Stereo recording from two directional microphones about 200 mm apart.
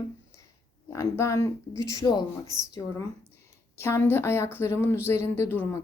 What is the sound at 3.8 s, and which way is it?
A woman's voice, 10° left (ahead or behind).